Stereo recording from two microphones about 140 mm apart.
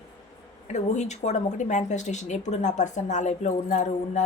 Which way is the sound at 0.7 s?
55° left (ahead or behind).